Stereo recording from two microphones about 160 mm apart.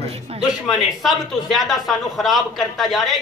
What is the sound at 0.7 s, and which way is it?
Speech, centre (ahead or behind).